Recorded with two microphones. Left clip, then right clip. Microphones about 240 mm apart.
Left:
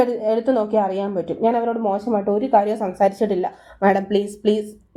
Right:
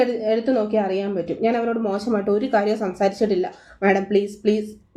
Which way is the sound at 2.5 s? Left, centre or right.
Centre.